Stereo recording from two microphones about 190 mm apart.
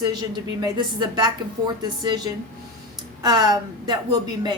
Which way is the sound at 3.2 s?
20° right (ahead or behind).